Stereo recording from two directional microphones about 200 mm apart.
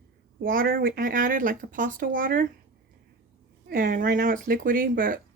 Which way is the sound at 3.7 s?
45° right (ahead or behind).